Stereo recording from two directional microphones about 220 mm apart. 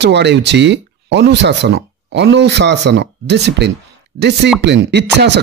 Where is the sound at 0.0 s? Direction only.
50° right (ahead or behind).